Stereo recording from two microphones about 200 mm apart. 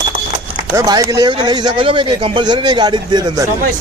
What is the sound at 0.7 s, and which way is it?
A man's voice, 15° right (ahead or behind).